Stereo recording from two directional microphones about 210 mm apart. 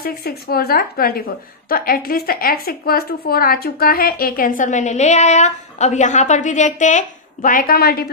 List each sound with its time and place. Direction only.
0.0 s a woman's voice: 45° left (ahead or behind)